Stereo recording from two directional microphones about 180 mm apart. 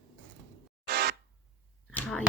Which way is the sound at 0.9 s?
60° right (ahead or behind).